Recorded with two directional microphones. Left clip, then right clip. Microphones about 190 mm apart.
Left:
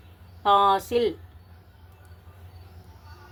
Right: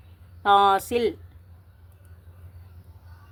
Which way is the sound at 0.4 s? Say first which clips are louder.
Right 1 dB; 35° right (ahead or behind).